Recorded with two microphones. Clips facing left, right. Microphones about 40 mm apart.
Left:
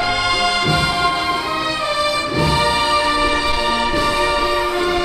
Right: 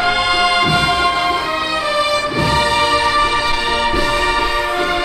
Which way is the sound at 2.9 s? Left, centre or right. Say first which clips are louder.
Right 2 dB; right.